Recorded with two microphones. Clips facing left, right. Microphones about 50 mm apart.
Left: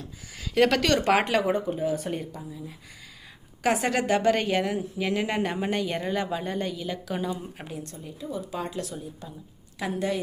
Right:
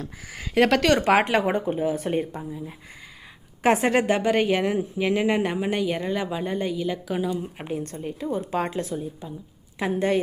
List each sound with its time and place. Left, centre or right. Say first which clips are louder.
0.0 s a sound: right 4 dB; right
0.5 s speech: right 3 dB; centre
1.4 s speech: right 2 dB; right
1.8 s speech: right 4 dB; right
3.6 s speech: right 5 dB; right; by 7.3 s centre
7.6 s speech: right 7 dB; right
7.9 s speech: right 6 dB; right